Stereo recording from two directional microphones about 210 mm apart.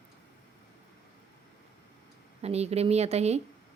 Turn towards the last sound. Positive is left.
turn(degrees=-30)  # may be behind; listen again after turning